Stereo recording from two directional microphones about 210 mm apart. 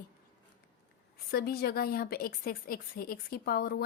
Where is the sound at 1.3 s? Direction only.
50° left (ahead or behind).